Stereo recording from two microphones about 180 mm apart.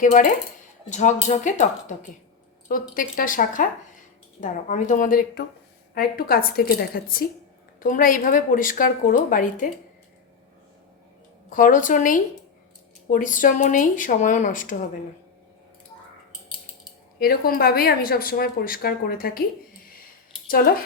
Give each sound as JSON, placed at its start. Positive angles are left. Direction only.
{"t": 0.0, "sound": "a woman's voice", "side_deg": 45}
{"t": 2.6, "sound": "a woman's voice", "side_deg": 50}
{"t": 11.4, "sound": "a woman's voice", "side_deg": 50}
{"t": 17.2, "sound": "speech", "side_deg": 55}